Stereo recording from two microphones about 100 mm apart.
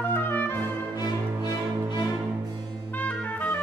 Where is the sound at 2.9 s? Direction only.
15° left (ahead or behind).